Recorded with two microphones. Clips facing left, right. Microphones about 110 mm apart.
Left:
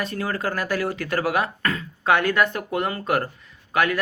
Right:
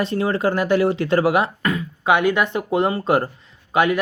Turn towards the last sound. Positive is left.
turn(degrees=-20)  # may be behind; listen again after turning